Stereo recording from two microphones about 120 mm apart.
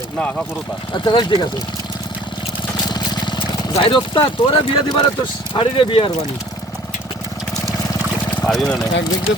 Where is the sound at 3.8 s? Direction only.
45° left (ahead or behind).